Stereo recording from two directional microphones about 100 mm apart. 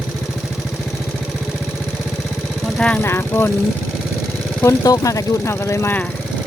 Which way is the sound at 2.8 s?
15° left (ahead or behind).